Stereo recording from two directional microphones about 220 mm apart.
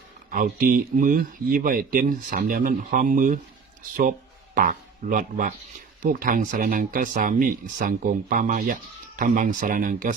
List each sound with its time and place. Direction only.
0.3 s speech: 40° right (ahead or behind)
4.5 s speech: 40° right (ahead or behind)